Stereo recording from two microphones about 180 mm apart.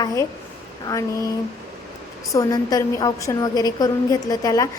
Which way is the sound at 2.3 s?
20° left (ahead or behind).